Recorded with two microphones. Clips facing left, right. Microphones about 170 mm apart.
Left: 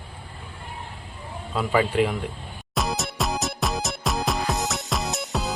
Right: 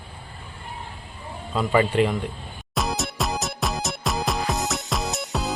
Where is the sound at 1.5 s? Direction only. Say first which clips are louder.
Right 2 dB; 5° left (ahead or behind).